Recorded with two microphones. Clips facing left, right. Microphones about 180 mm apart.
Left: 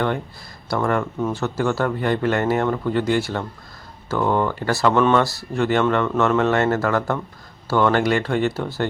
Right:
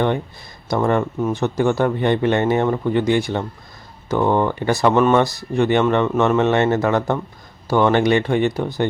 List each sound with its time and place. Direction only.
0.7 s speech: 20° right (ahead or behind)